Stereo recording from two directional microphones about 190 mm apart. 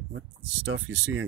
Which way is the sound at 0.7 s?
90° right.